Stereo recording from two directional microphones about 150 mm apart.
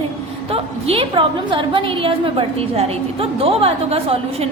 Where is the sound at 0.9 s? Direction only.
35° right (ahead or behind).